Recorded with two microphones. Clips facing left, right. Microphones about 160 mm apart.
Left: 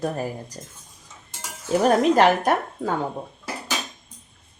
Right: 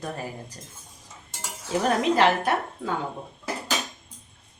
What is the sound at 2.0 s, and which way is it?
Speech, 45° left (ahead or behind).